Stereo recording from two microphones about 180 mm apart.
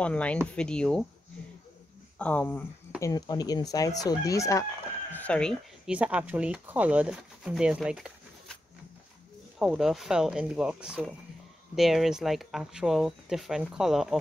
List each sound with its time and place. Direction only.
0.0 s speech: 5° left (ahead or behind)
2.1 s speech: 10° left (ahead or behind)
3.0 s speech: 20° left (ahead or behind)
5.1 s speech: 5° left (ahead or behind)
5.9 s speech: 5° right (ahead or behind)
9.6 s speech: centre (ahead or behind)